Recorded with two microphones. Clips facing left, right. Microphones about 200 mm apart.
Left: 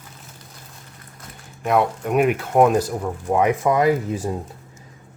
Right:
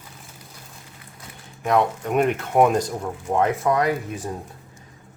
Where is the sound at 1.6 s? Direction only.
5° left (ahead or behind); by 4.2 s 25° left (ahead or behind).